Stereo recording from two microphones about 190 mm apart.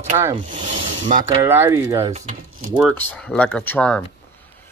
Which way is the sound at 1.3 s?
15° right (ahead or behind).